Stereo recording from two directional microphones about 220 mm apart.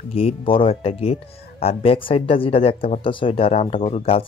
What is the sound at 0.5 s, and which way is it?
Speech, 25° left (ahead or behind).